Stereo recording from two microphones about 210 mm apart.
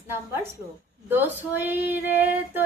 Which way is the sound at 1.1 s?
10° right (ahead or behind).